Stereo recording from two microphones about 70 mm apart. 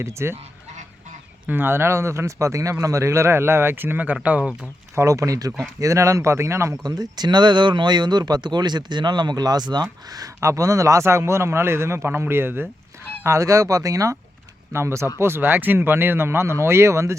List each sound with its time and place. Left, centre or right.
0.0 s speech: right
1.5 s speech: right
4.9 s speech: right
6.8 s speech: right
10.1 s speech: right
13.2 s speech: right
14.7 s speech: right